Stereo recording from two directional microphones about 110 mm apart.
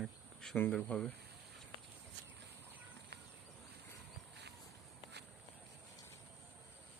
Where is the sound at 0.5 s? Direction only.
20° left (ahead or behind).